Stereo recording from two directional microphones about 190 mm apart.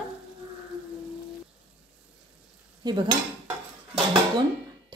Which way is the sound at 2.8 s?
20° right (ahead or behind).